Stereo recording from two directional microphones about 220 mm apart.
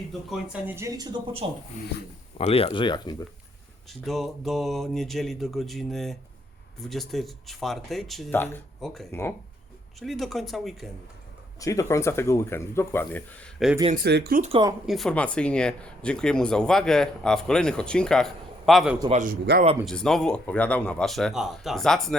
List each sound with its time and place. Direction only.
0.1 s speech: centre (ahead or behind); by 1.5 s 25° right (ahead or behind)
2.4 s speech: 25° left (ahead or behind)
3.8 s speech: centre (ahead or behind)
11.6 s speech: 15° left (ahead or behind)
13.9 s speech: 45° right (ahead or behind)
14.4 s speech: 25° right (ahead or behind)
14.8 s speech: centre (ahead or behind)
19.1 s a man's voice: 40° right (ahead or behind)
19.8 s speech: centre (ahead or behind)